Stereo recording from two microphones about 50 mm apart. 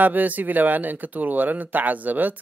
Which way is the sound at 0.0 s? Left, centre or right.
Right.